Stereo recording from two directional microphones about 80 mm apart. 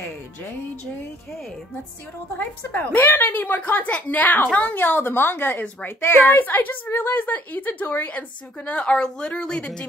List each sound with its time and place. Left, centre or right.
2.3 s a woman's voice: left